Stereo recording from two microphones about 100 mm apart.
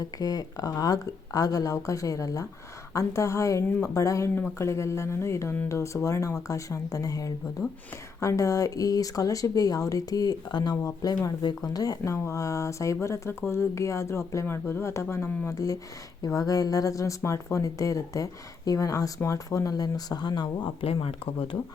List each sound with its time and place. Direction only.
0.0 s speech: 40° left (ahead or behind); by 15.5 s 25° left (ahead or behind)
15.5 s speech: 35° left (ahead or behind)
20.8 s speech: 70° left (ahead or behind)